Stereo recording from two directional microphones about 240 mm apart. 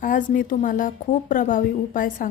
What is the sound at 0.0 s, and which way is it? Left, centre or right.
Speech, left.